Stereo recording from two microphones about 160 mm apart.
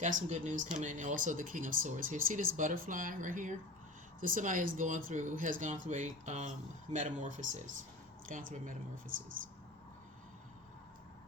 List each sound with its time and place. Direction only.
0.0 s speech: 50° right (ahead or behind)